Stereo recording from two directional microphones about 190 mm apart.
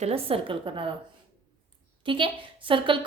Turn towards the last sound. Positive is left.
turn(degrees=-25)  # may be behind; listen again after turning